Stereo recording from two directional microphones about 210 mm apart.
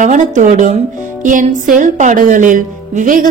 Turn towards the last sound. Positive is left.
turn(degrees=-40)  # may be behind; listen again after turning